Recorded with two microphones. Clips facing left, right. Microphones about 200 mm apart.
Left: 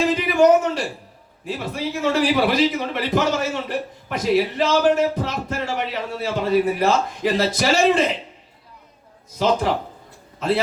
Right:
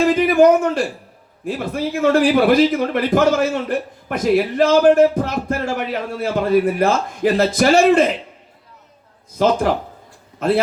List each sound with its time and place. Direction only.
0.1 s a man's voice: 50° right (ahead or behind)
9.4 s a man's voice: 50° right (ahead or behind)